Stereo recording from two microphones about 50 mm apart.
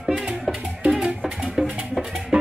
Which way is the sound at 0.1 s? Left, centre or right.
Centre.